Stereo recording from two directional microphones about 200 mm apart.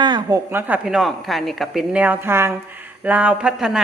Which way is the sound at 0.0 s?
20° right (ahead or behind).